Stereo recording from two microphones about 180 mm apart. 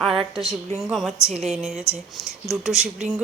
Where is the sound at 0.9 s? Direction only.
Centre (ahead or behind).